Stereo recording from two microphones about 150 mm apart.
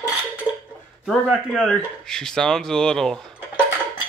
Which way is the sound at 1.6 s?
5° left (ahead or behind).